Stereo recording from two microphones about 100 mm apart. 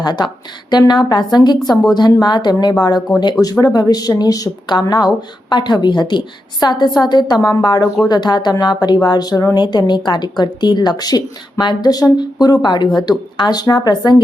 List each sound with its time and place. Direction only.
0.0 s speech: 45° left (ahead or behind)